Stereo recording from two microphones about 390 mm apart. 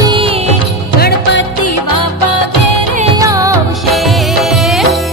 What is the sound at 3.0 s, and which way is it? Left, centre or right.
Music, centre.